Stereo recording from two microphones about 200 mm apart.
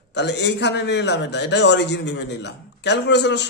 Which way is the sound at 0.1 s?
60° left (ahead or behind).